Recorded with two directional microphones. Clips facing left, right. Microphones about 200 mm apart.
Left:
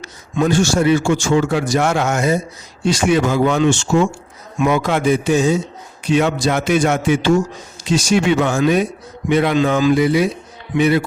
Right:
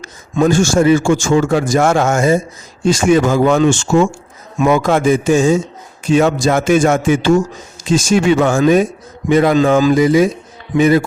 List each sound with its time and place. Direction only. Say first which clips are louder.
0.3 s a man's voice: right 3 dB; 45° right (ahead or behind)